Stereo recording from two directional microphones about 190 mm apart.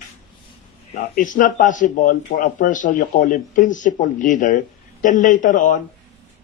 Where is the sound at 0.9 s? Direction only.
45° left (ahead or behind).